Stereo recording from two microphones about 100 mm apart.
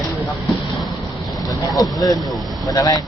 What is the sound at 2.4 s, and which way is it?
Speech, 45° right (ahead or behind).